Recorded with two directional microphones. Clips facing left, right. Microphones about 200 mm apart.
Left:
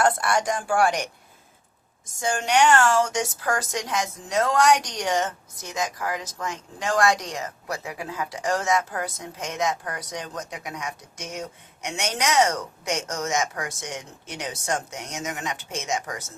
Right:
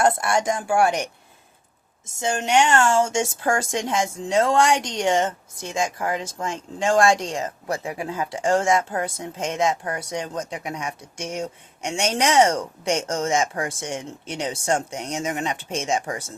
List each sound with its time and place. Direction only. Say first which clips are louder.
0.0 s speech: right 2 dB; 25° right (ahead or behind)
2.1 s speech: right 2 dB; 25° right (ahead or behind)